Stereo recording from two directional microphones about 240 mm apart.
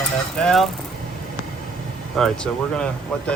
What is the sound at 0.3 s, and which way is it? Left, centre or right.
Stir, centre.